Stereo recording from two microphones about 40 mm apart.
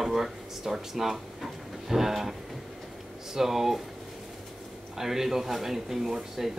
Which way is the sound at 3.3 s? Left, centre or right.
Centre.